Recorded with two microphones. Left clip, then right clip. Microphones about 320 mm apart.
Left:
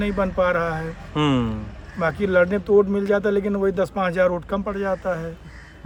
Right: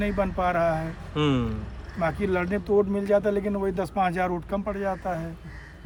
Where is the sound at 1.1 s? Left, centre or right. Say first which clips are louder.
Left 4 dB; centre.